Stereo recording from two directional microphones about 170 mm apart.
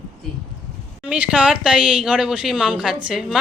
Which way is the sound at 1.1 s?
5° right (ahead or behind).